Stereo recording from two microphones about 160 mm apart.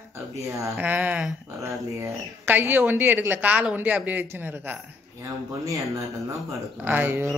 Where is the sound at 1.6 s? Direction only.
20° right (ahead or behind).